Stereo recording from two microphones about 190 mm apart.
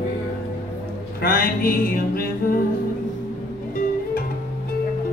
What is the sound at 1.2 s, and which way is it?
Music, 50° left (ahead or behind).